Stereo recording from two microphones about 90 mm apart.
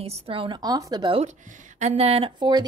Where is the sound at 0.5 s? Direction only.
45° right (ahead or behind).